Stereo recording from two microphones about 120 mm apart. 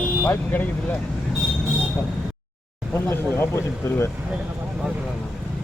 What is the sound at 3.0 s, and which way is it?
Speech, 20° left (ahead or behind).